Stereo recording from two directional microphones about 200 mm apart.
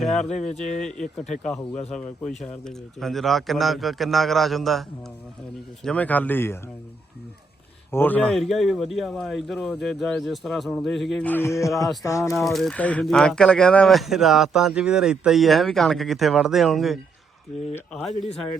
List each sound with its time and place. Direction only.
0.4 s speech: 5° left (ahead or behind)
7.9 s speech: 10° left (ahead or behind)
11.7 s speech: centre (ahead or behind)
12.0 s speech: 15° left (ahead or behind)
12.3 s speech: centre (ahead or behind)